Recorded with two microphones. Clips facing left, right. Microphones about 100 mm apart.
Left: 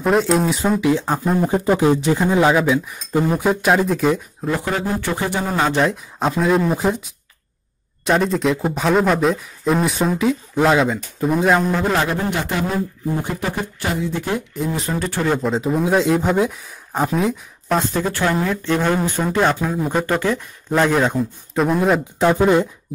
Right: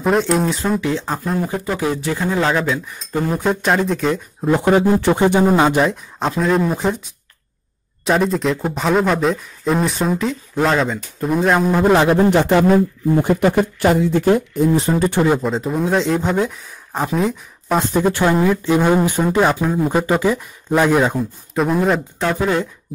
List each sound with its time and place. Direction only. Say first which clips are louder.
0.0 s a man's voice: even; centre (ahead or behind)
0.7 s a man's voice: left 2 dB; 10° left (ahead or behind)
1.5 s speech: left 5 dB; 25° left (ahead or behind); by 4.2 s 5° left (ahead or behind)
4.5 s speech: right 7 dB; 25° right (ahead or behind)
5.8 s a man's voice: right 1 dB; centre (ahead or behind)
8.0 s a man's voice: right 1 dB; centre (ahead or behind)
11.9 s speech: right 6 dB; 20° right (ahead or behind)
12.2 s speech: right 9 dB; 35° right (ahead or behind)
12.5 s speech: right 8 dB; 55° right (ahead or behind)
14.8 s speech: right 6 dB; 20° right (ahead or behind)
15.3 s a man's voice: even; centre (ahead or behind)
17.9 s a man's voice: right 4 dB; 15° right (ahead or behind); by 22.0 s centre (ahead or behind)
22.2 s speech: left 6 dB; 15° left (ahead or behind)